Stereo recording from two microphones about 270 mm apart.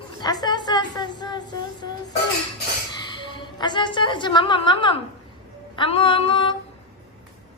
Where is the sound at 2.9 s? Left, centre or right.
Centre.